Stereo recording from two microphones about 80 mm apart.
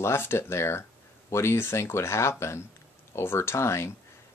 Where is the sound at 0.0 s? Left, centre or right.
Left.